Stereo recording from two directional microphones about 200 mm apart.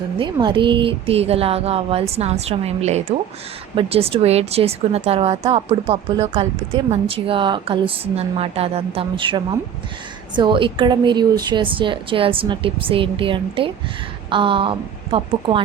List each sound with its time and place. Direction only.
0.2 s a woman's voice: 25° right (ahead or behind)